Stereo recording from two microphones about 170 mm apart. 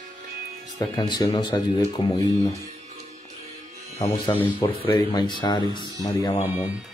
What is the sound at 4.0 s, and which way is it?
Speech, 20° left (ahead or behind).